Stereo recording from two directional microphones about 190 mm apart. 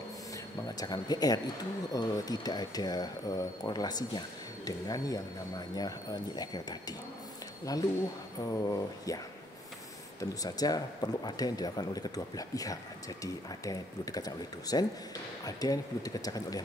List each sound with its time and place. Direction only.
0.7 s speech: 20° left (ahead or behind)
10.4 s speech: 20° left (ahead or behind)